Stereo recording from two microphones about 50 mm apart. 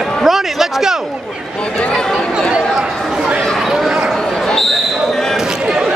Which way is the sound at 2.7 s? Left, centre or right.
Centre.